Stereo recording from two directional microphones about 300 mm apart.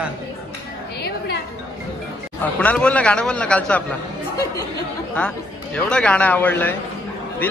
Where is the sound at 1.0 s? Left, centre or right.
Left.